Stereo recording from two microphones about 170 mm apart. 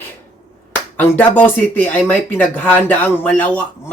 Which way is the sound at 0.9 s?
10° left (ahead or behind).